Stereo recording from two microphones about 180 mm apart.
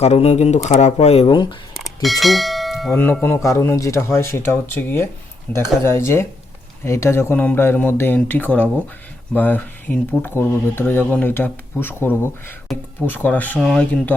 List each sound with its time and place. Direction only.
0.0 s speech: 35° left (ahead or behind)
1.7 s bell: centre (ahead or behind)
2.9 s speech: 10° left (ahead or behind)